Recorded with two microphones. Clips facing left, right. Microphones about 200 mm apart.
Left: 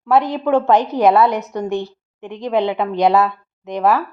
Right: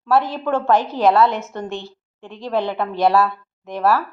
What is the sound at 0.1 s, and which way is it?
A woman's voice, 20° left (ahead or behind).